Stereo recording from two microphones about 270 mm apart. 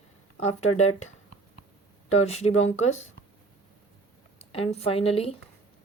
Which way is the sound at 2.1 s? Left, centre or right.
Left.